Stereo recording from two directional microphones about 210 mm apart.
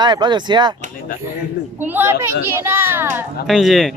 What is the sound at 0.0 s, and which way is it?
Speech, 20° right (ahead or behind).